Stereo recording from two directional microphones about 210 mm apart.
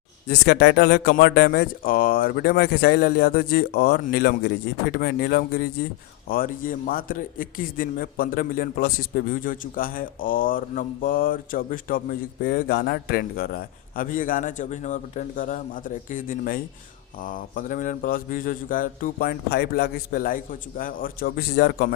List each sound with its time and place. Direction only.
0.3 s speech: 50° left (ahead or behind)